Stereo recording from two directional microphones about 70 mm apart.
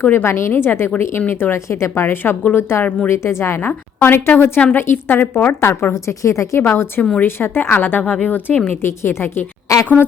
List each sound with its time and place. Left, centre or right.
0.0 s a woman's voice: left
3.7 s a woman's voice: left
7.0 s speech: left
9.7 s a sound: left